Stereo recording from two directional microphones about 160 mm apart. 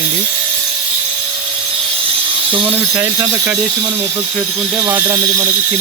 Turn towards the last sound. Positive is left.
turn(degrees=-15)  # may be behind; listen again after turning